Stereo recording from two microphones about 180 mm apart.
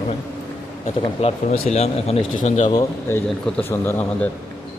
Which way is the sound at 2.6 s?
15° left (ahead or behind).